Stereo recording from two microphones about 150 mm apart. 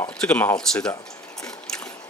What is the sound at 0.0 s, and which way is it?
Speech, 10° left (ahead or behind).